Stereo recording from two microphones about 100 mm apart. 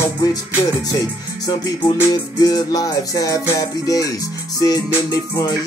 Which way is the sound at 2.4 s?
40° left (ahead or behind).